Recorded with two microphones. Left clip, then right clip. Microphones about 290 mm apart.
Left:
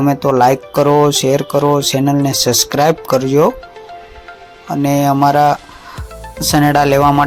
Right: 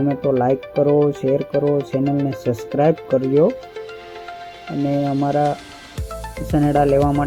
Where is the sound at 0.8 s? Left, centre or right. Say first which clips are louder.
Left 5 dB; left.